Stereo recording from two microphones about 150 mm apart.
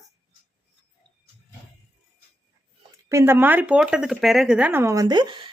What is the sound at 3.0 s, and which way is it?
Speech, 20° right (ahead or behind).